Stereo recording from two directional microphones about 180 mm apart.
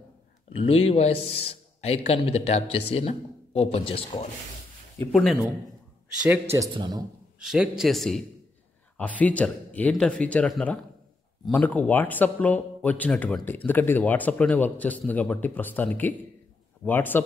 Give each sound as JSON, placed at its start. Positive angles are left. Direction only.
{"t": 0.5, "sound": "a man's voice", "side_deg": 35}
{"t": 5.1, "sound": "a man's voice", "side_deg": 0}
{"t": 6.7, "sound": "a man's voice", "side_deg": -25}
{"t": 7.3, "sound": "a man's voice", "side_deg": -5}